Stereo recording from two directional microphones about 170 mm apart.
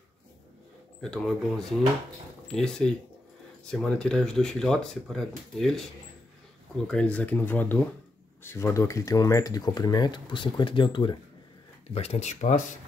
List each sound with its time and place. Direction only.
1.0 s speech: 5° left (ahead or behind)
6.9 s speech: 5° left (ahead or behind); by 11.1 s 30° left (ahead or behind)
11.9 s speech: 40° left (ahead or behind)